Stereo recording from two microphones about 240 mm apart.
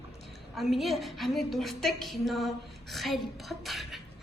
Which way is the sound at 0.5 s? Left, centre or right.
Centre.